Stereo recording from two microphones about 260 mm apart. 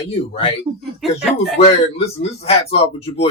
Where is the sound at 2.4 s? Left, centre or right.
Left.